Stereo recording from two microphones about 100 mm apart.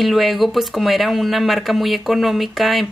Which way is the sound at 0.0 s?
Centre (ahead or behind).